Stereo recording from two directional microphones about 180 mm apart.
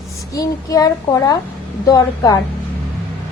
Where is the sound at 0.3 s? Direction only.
20° left (ahead or behind).